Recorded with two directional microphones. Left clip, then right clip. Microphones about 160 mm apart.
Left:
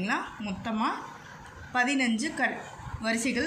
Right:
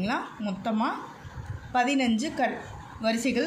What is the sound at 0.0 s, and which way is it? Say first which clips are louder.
A woman's voice: right 1 dB; 40° right (ahead or behind).